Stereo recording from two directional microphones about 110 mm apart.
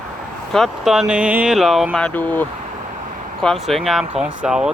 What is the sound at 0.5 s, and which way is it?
Speech, centre (ahead or behind).